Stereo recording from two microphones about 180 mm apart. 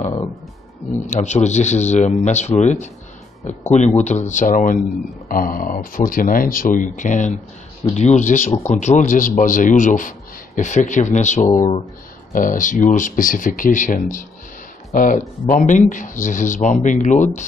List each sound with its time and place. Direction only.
1.0 s a man's voice: 40° left (ahead or behind)